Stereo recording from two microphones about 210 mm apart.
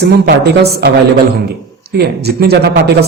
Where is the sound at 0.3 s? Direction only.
50° right (ahead or behind).